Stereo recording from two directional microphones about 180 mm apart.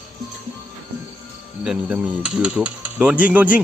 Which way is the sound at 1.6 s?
5° right (ahead or behind).